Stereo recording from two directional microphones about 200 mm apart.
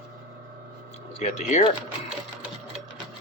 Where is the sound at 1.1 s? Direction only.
35° left (ahead or behind).